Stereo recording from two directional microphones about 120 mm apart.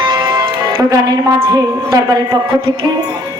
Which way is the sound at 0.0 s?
40° right (ahead or behind).